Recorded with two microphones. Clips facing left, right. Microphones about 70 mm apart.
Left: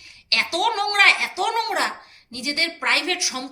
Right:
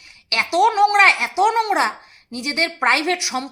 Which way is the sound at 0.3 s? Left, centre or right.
Right.